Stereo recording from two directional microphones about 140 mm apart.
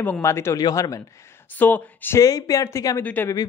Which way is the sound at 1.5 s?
10° left (ahead or behind).